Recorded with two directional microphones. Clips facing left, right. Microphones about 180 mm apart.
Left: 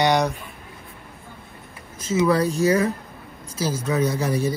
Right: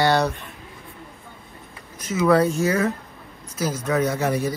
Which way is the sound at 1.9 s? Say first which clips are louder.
Right 1 dB; 25° left (ahead or behind).